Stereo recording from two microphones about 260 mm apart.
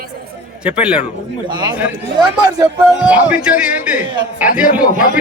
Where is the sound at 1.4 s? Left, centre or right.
Centre.